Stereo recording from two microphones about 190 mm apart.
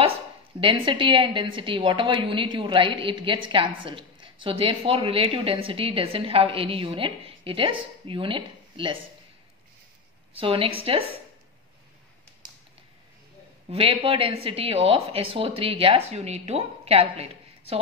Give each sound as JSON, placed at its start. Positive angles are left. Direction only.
{"t": 0.6, "sound": "a woman's voice", "side_deg": -25}
{"t": 10.4, "sound": "a woman's voice", "side_deg": -30}
{"t": 13.7, "sound": "a woman's voice", "side_deg": -30}